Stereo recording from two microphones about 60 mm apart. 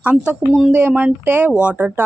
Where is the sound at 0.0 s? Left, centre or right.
Right.